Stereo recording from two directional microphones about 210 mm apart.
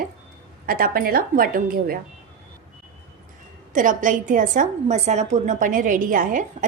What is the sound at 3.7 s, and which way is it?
A woman's voice, 40° right (ahead or behind).